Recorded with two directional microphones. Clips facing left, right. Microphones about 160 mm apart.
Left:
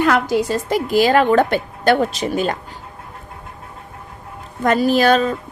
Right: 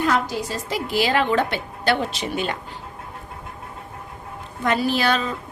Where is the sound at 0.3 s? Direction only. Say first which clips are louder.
Left 9 dB; 60° left (ahead or behind); by 2.6 s 40° left (ahead or behind).